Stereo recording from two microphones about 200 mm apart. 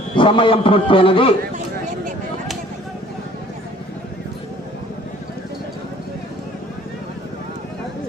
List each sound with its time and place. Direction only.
0.2 s a man's voice: 25° left (ahead or behind)